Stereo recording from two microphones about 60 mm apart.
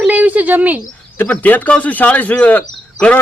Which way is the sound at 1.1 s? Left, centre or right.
Left.